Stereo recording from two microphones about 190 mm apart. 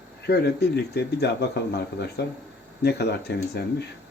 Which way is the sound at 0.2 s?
60° left (ahead or behind).